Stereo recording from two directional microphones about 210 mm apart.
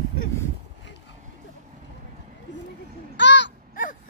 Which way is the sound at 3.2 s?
55° left (ahead or behind).